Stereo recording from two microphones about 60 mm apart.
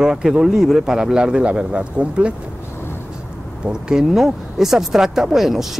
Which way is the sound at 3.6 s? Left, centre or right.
Centre.